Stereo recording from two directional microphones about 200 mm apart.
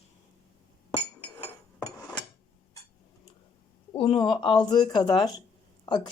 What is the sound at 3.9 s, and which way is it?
Speech, 25° left (ahead or behind).